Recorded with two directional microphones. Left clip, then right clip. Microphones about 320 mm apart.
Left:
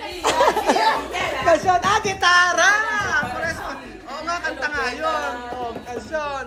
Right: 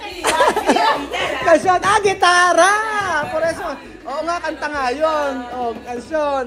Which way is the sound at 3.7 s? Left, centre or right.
Centre.